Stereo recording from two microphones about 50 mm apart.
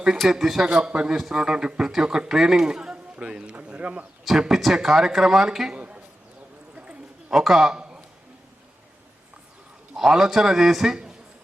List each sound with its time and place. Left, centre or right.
0.3 s speech: centre
0.8 s speech: centre
4.3 s speech: centre
7.3 s speech: centre
7.8 s a sound: centre
9.9 s speech: centre